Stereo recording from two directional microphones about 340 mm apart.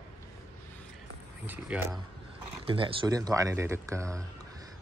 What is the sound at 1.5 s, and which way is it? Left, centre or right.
Speech, centre.